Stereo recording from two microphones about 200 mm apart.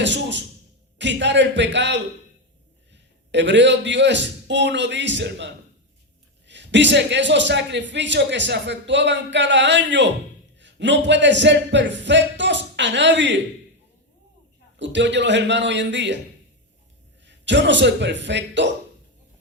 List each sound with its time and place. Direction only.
0.0 s music: 65° right (ahead or behind)
0.9 s a man's voice: 60° right (ahead or behind)
14.8 s a man's voice: 65° right (ahead or behind)
17.2 s a man's voice: 60° right (ahead or behind)